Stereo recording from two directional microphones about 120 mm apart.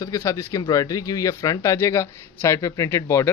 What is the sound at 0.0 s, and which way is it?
Speech, 30° left (ahead or behind).